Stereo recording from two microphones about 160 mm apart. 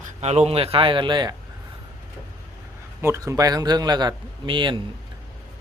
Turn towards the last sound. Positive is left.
turn(degrees=-30)  # may be behind; listen again after turning